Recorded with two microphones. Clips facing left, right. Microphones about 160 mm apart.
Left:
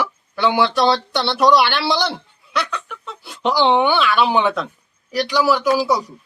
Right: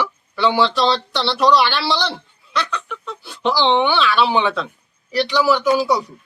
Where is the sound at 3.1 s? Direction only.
20° left (ahead or behind).